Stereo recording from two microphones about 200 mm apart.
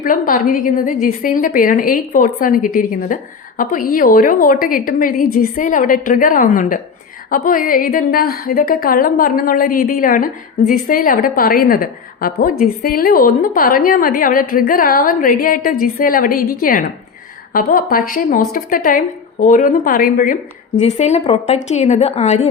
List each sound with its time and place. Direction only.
0.0 s a woman's voice: 45° left (ahead or behind)
21.0 s a woman's voice: 30° left (ahead or behind)